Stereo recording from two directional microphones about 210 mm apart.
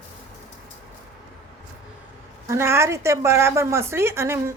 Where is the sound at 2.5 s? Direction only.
10° right (ahead or behind).